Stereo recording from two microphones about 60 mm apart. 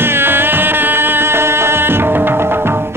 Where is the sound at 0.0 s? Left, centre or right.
Right.